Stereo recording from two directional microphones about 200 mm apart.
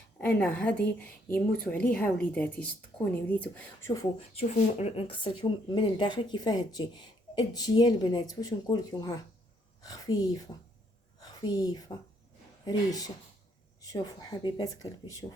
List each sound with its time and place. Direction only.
0.2 s a woman's voice: 10° left (ahead or behind)
4.4 s a woman's voice: 30° left (ahead or behind)